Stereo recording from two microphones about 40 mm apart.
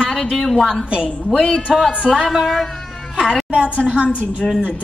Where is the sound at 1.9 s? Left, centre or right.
Right.